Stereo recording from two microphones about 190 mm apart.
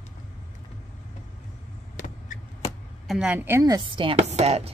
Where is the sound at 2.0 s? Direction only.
45° left (ahead or behind).